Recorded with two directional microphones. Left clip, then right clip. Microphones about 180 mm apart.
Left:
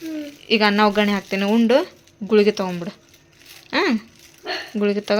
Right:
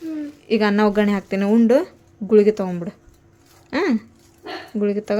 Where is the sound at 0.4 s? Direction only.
20° right (ahead or behind).